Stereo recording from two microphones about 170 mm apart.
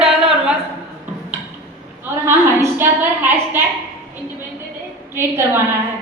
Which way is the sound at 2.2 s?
15° right (ahead or behind).